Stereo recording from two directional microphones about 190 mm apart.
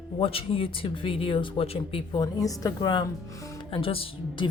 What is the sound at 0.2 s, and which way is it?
Speech, 30° left (ahead or behind).